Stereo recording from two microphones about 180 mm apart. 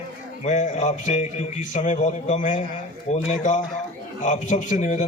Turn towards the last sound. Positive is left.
turn(degrees=40)  # may be behind; listen again after turning